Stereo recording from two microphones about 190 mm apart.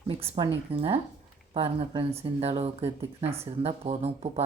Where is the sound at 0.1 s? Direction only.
30° right (ahead or behind).